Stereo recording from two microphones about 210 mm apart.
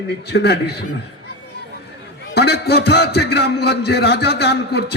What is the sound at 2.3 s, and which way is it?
A man's voice, 50° left (ahead or behind).